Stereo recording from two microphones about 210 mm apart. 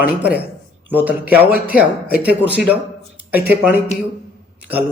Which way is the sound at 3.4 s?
10° right (ahead or behind).